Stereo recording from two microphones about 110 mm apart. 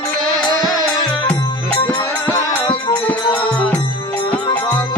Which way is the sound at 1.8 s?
25° left (ahead or behind).